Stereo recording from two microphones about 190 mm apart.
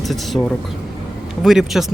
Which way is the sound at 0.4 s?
15° left (ahead or behind).